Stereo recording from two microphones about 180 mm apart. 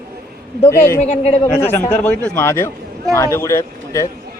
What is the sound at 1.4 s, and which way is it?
Speech, 15° left (ahead or behind).